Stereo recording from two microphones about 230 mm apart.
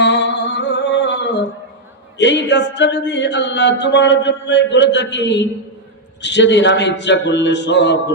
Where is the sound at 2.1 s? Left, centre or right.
Left.